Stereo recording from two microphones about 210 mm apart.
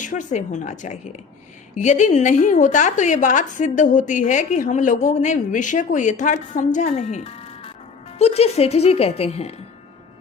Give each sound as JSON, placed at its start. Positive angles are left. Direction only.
{"t": 0.0, "sound": "a woman's voice", "side_deg": 35}